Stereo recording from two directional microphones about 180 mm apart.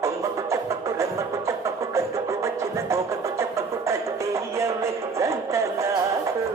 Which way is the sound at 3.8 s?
15° right (ahead or behind).